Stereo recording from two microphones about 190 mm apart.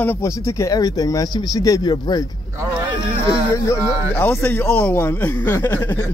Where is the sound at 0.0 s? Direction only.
15° left (ahead or behind).